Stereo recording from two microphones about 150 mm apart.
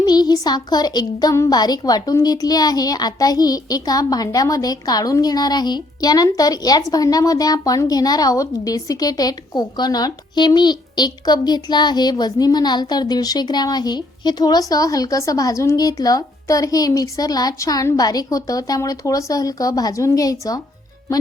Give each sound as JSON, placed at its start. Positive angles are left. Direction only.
{"t": 0.0, "sound": "a woman's voice", "side_deg": 25}